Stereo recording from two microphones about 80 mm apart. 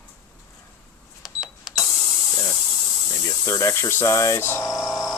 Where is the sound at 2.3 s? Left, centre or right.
Left.